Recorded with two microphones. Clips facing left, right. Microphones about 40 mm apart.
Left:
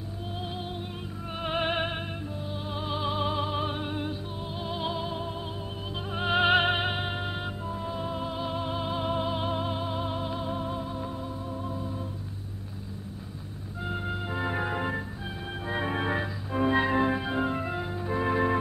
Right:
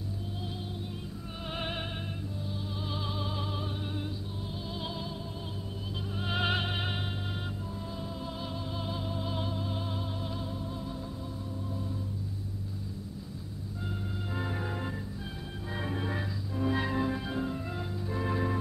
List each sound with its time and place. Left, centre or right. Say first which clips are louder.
1.3 s music: left 9 dB; left
5.1 s music: left 6 dB; left
9.0 s music: left 7 dB; left
9.8 s music: left 6 dB; left
10.5 s music: left 7 dB; left
10.8 s music: left 5 dB; left
13.8 s music: left 7 dB; left
14.3 s music: left 6 dB; left